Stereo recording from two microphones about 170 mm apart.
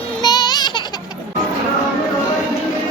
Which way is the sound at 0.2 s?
25° left (ahead or behind).